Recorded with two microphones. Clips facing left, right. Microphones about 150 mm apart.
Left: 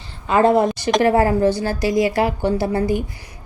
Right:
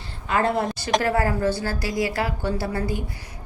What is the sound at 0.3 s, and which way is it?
A woman's voice, 20° left (ahead or behind).